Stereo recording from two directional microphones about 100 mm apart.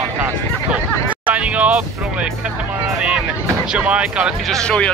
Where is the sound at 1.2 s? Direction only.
15° right (ahead or behind).